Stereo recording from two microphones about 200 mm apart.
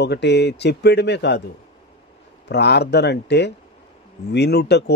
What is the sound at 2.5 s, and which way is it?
A man's voice, 55° left (ahead or behind).